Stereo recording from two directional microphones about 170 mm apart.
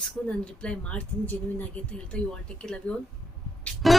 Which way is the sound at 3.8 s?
Centre (ahead or behind).